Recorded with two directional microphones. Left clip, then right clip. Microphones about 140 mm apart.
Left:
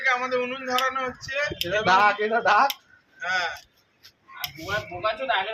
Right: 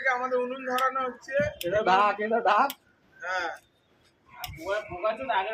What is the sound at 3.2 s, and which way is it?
Speech, 45° right (ahead or behind).